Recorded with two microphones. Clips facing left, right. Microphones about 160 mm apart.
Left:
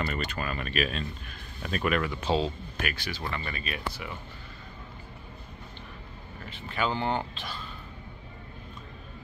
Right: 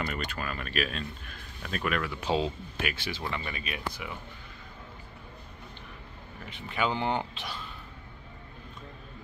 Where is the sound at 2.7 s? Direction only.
25° right (ahead or behind).